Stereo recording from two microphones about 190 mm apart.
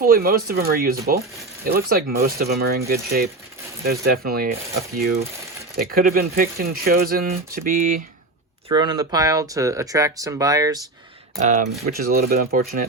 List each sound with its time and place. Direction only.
0.0 s speech: 50° right (ahead or behind)
5.7 s speech: 50° right (ahead or behind)
8.7 s speech: 20° right (ahead or behind)
11.4 s speech: 45° right (ahead or behind)